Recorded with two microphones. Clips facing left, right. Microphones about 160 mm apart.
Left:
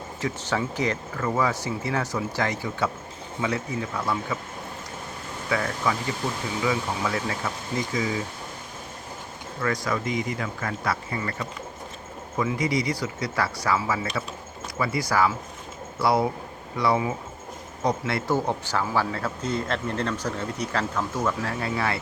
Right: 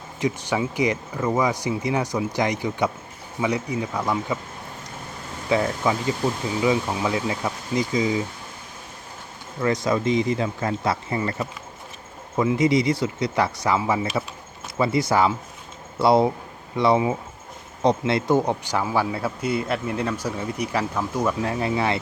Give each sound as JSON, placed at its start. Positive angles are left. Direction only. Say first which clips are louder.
{"t": 0.2, "sound": "speech", "louder": "right 4 dB", "side_deg": -15}
{"t": 5.5, "sound": "speech", "louder": "right 5 dB", "side_deg": -25}
{"t": 9.6, "sound": "speech", "louder": "right 5 dB", "side_deg": -20}